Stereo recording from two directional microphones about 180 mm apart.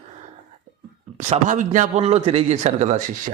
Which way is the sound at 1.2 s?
40° right (ahead or behind).